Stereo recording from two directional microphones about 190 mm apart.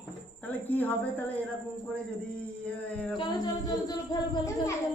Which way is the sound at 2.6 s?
5° left (ahead or behind).